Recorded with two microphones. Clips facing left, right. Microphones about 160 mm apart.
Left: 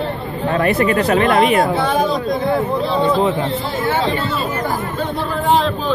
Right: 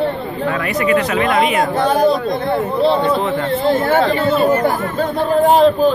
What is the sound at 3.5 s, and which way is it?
Speech, 55° right (ahead or behind).